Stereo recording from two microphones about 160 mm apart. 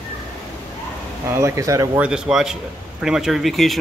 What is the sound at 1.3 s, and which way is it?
Speech, 20° right (ahead or behind).